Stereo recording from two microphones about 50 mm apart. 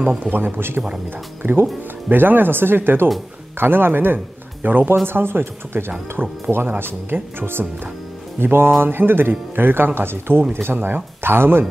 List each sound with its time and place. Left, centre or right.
0.3 s speech: right